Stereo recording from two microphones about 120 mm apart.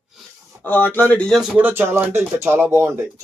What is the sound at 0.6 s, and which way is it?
Speech, 15° left (ahead or behind).